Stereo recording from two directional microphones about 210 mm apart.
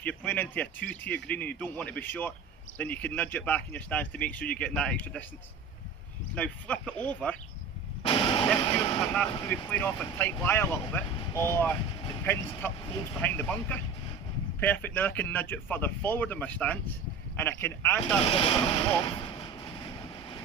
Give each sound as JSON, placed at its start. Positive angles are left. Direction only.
{"t": 0.0, "sound": "speech", "side_deg": 5}
{"t": 6.3, "sound": "speech", "side_deg": 5}
{"t": 8.0, "sound": "a sound", "side_deg": 20}
{"t": 8.5, "sound": "vehicle", "side_deg": 20}
{"t": 9.0, "sound": "speech", "side_deg": 5}
{"t": 9.3, "sound": "speech", "side_deg": 20}
{"t": 18.2, "sound": "vehicle", "side_deg": 25}